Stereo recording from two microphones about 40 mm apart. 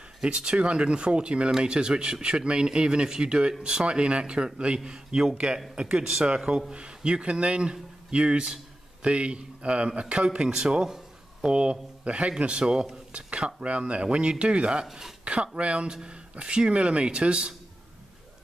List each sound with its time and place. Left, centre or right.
0.2 s speech: right
13.1 s a sound: right
13.6 s speech: right
14.9 s speech: centre
15.2 s speech: right